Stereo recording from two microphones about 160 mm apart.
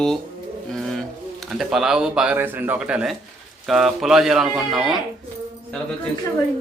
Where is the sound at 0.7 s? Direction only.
Centre (ahead or behind).